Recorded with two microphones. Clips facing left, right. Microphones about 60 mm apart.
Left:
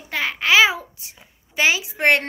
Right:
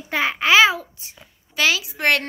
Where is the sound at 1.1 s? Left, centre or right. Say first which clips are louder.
Left 1 dB; left.